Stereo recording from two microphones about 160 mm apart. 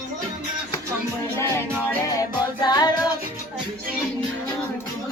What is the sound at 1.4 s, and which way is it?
Music, 15° left (ahead or behind).